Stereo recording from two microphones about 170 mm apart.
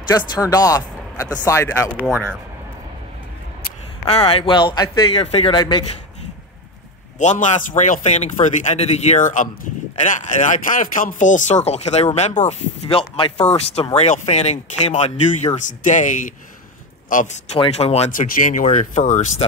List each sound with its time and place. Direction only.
0.1 s speech: 20° left (ahead or behind)
4.1 s speech: 35° left (ahead or behind)
7.2 s speech: 45° left (ahead or behind)
17.6 s speech: 35° left (ahead or behind)